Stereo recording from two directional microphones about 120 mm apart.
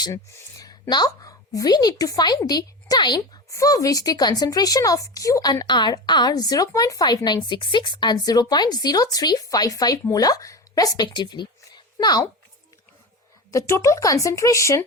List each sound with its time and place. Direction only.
0.0 s a woman's voice: 30° left (ahead or behind)
13.5 s speech: 25° left (ahead or behind)